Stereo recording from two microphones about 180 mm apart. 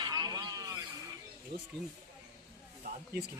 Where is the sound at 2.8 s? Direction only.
60° right (ahead or behind).